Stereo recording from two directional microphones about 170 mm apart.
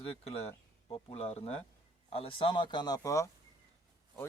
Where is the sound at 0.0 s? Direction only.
35° left (ahead or behind).